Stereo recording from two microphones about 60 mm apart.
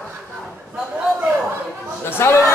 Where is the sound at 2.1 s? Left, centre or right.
Left.